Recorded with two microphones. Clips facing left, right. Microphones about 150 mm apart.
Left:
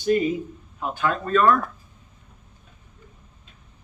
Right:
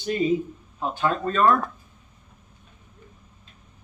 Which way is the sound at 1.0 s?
30° right (ahead or behind).